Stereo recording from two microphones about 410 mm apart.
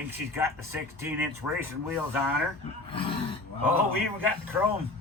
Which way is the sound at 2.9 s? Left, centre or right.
Centre.